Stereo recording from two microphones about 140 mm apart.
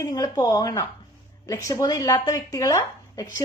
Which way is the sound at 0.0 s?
25° left (ahead or behind).